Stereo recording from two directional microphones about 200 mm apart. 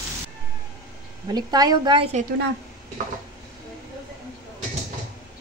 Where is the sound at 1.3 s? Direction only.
20° right (ahead or behind).